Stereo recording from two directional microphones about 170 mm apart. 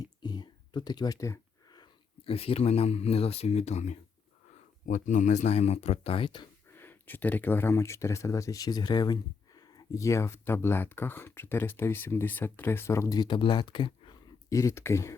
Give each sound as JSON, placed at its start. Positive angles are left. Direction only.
{"t": 0.0, "sound": "speech", "side_deg": 25}
{"t": 6.7, "sound": "speech", "side_deg": 10}